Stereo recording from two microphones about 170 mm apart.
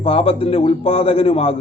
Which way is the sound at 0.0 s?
35° left (ahead or behind).